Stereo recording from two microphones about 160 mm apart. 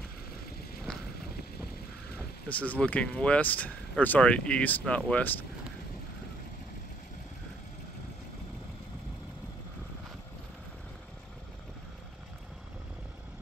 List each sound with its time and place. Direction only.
0.9 s vehicle: 5° left (ahead or behind)
2.1 s speech: 10° left (ahead or behind)